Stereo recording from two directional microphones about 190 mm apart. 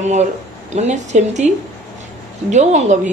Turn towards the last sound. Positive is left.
turn(degrees=-40)  # may be behind; listen again after turning